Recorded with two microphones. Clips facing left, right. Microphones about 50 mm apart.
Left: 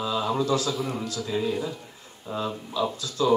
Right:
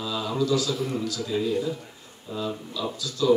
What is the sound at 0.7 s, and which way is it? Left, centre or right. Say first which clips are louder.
A man's voice: right 1 dB; centre.